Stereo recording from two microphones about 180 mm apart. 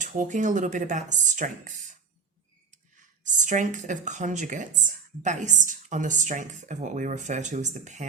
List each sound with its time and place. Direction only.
0.0 s speech: 45° right (ahead or behind)
3.3 s speech: 45° right (ahead or behind)